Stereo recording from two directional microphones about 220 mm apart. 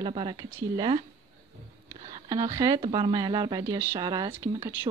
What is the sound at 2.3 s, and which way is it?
Speech, 15° right (ahead or behind).